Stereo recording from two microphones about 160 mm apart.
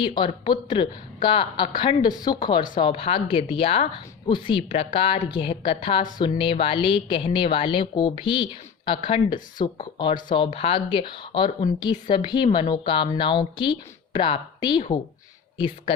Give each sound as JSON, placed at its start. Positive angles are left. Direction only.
{"t": 0.0, "sound": "a woman's voice", "side_deg": 30}